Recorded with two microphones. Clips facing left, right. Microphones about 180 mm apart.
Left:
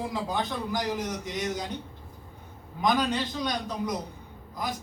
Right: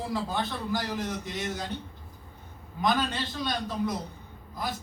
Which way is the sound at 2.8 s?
15° left (ahead or behind).